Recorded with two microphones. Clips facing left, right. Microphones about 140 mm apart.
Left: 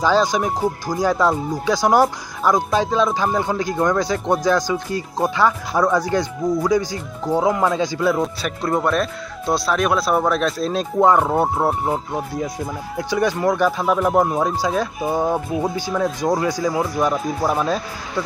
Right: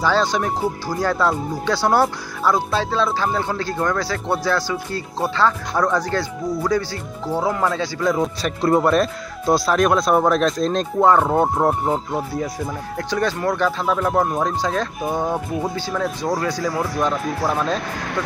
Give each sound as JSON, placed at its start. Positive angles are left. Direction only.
{"t": 0.0, "sound": "speech", "side_deg": 15}
{"t": 8.1, "sound": "speech", "side_deg": 5}